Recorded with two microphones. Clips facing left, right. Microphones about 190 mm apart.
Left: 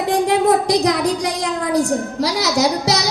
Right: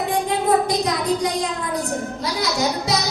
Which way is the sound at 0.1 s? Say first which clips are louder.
Left 5 dB; 80° left.